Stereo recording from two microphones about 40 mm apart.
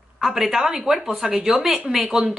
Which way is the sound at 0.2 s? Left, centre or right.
Centre.